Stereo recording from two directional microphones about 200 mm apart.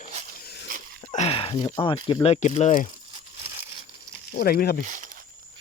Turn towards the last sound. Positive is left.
turn(degrees=50)  # may be behind; listen again after turning